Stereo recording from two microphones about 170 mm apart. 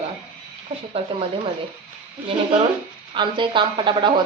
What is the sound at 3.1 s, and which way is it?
A woman's voice, 30° right (ahead or behind).